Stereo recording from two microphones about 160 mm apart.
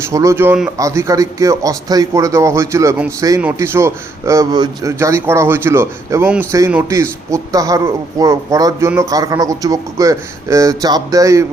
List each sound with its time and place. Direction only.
0.1 s speech: 20° right (ahead or behind)